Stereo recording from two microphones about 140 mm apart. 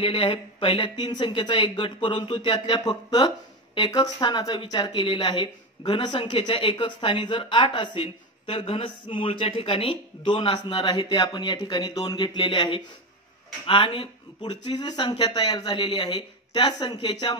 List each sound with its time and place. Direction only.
0.0 s speech: 35° left (ahead or behind)